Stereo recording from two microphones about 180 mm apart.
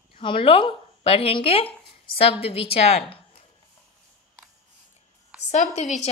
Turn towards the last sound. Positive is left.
turn(degrees=40)  # may be behind; listen again after turning